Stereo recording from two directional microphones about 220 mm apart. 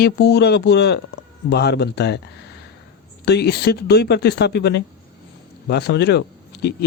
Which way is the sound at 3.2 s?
50° left (ahead or behind).